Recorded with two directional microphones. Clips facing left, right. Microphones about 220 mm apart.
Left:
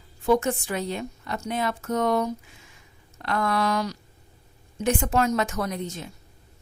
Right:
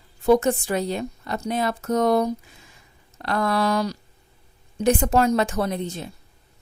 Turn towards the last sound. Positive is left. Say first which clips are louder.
# right 4 dB
turn(degrees=-30)  # may be behind; listen again after turning